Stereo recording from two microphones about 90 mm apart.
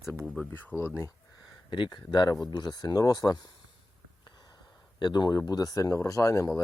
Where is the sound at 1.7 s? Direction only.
60° left (ahead or behind).